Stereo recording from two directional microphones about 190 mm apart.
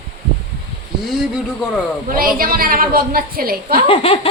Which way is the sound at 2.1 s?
50° right (ahead or behind).